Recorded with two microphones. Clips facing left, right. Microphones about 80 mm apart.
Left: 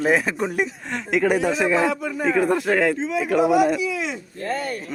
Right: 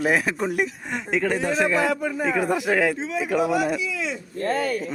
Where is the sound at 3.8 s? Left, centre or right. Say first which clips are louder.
Left 4 dB; left.